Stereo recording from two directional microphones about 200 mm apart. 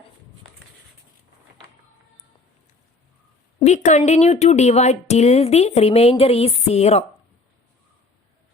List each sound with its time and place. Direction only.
3.6 s speech: 35° left (ahead or behind)